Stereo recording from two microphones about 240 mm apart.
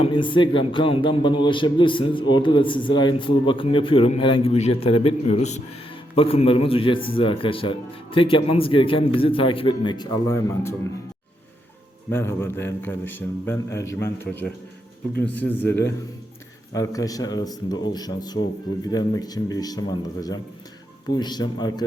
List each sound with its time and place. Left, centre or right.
0.0 s a man's voice: centre
12.1 s a man's voice: centre